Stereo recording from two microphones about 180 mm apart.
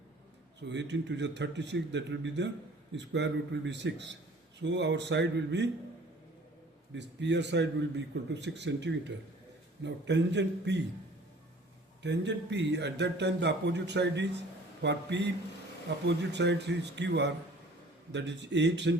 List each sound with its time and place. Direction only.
0.6 s a man's voice: 75° right (ahead or behind)
6.9 s a man's voice: 75° right (ahead or behind)
12.0 s a man's voice: 75° right (ahead or behind)